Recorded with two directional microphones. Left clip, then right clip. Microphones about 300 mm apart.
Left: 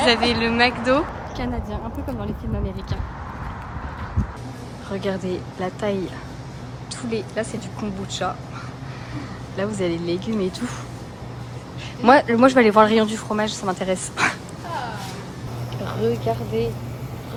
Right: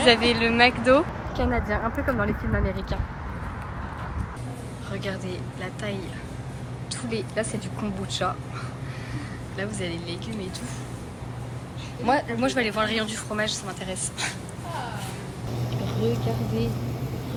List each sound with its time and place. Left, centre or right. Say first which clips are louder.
0.0 s speech: left 1 dB; centre
4.9 s speech: left 7 dB; centre
7.1 s speech: left 3 dB; centre
9.6 s a woman's voice: left 8 dB; centre
12.0 s a woman's voice: left 10 dB; left
15.8 s a sound: left 5 dB; centre
16.5 s speech: left 6 dB; centre